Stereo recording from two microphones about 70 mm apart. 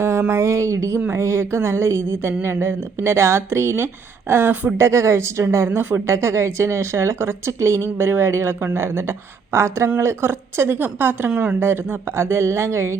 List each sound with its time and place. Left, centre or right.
0.0 s a woman's voice: right